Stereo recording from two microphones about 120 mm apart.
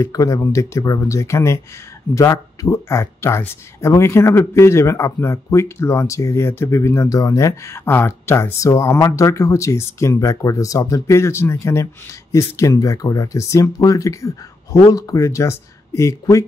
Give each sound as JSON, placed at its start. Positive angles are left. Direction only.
{"t": 0.0, "sound": "speech", "side_deg": 25}